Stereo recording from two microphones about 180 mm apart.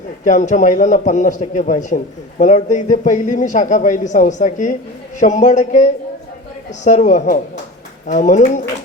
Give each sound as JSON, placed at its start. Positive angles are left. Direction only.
{"t": 0.3, "sound": "a man's voice", "side_deg": 45}